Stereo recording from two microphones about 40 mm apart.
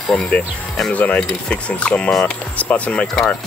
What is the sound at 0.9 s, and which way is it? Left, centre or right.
Speech, left.